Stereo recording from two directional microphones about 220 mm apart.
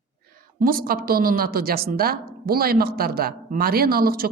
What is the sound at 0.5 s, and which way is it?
A woman's voice, 40° right (ahead or behind).